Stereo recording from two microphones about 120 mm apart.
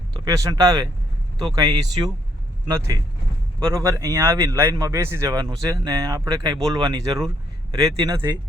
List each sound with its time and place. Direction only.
0.3 s a man's voice: 30° right (ahead or behind)